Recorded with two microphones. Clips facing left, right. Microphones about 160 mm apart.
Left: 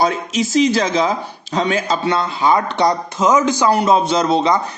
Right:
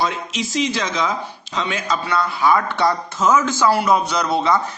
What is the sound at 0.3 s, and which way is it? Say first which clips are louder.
A man's voice: left 8 dB; 40° left (ahead or behind).